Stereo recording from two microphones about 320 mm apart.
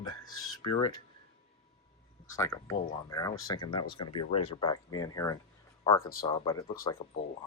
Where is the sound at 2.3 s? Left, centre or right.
Centre.